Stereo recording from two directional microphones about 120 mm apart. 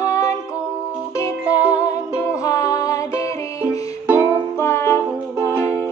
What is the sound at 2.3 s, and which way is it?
Music, 25° left (ahead or behind).